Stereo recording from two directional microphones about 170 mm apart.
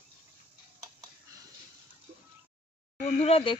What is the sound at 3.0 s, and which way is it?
Speech, 35° left (ahead or behind).